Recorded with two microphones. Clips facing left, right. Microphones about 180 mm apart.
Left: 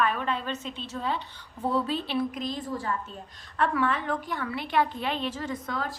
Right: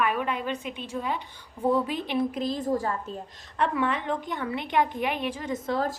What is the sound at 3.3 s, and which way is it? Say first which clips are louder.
A woman's voice: left 1 dB; 20° right (ahead or behind).